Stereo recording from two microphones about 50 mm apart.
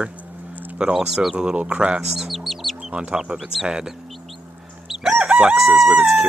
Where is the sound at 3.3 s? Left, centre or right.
Centre.